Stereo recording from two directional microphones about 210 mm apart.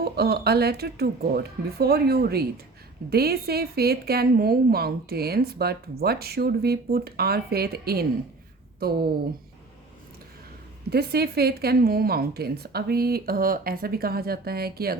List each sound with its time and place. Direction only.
0.0 s speech: 50° right (ahead or behind)
10.9 s speech: 50° right (ahead or behind)